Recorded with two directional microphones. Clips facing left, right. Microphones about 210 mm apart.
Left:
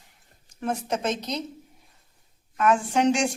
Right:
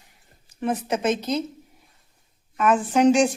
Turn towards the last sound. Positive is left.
turn(degrees=0)  # may be behind; listen again after turning